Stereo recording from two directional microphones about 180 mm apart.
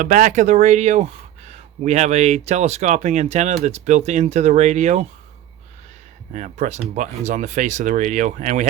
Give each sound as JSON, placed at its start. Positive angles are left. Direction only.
{"t": 0.0, "sound": "speech", "side_deg": -45}
{"t": 6.3, "sound": "speech", "side_deg": -40}